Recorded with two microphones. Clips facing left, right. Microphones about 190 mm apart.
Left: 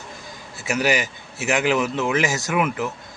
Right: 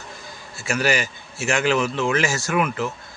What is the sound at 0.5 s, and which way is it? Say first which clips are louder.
A man's voice: left 1 dB; 20° left (ahead or behind).